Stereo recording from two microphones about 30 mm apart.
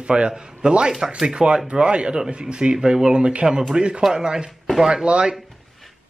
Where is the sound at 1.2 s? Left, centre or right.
Right.